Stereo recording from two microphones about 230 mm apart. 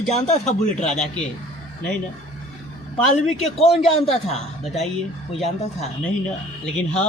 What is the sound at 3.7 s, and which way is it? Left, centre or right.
Speech, left.